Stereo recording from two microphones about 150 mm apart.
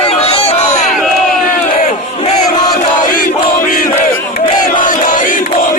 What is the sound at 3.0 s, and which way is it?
Battle cry, 65° left (ahead or behind).